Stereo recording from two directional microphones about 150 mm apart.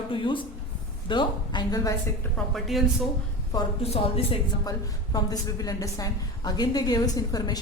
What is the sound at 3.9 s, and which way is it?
Speech, 40° left (ahead or behind).